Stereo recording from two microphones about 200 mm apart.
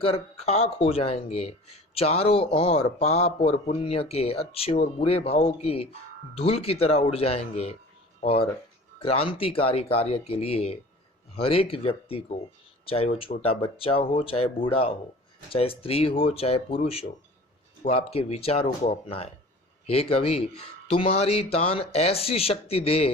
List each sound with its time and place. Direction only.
0.0 s speech: 30° left (ahead or behind)